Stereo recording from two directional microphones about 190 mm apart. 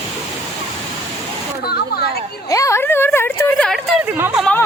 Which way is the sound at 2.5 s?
15° left (ahead or behind).